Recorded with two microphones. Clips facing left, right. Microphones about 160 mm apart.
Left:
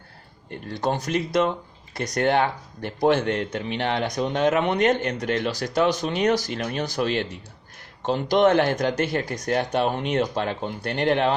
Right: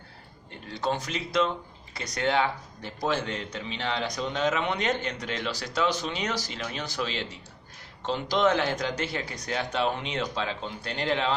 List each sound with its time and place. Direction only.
0.5 s a man's voice: 50° left (ahead or behind)